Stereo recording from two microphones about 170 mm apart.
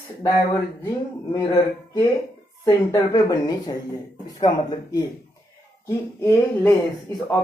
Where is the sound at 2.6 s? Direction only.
20° left (ahead or behind).